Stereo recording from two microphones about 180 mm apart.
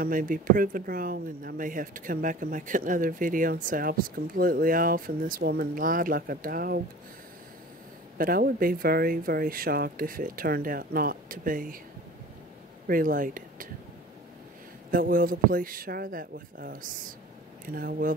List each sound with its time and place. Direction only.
0.0 s speech: 50° right (ahead or behind)
8.2 s speech: 55° right (ahead or behind)
12.8 s speech: 50° right (ahead or behind)
14.9 s speech: 50° right (ahead or behind)